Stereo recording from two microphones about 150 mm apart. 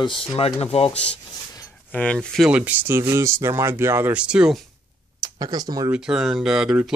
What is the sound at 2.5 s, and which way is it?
Speech, 10° right (ahead or behind).